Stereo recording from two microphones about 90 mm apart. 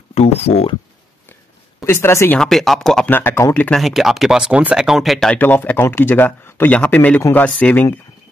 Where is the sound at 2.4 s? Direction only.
Centre (ahead or behind).